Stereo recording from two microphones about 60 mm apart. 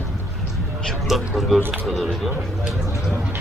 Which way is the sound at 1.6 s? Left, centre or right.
Right.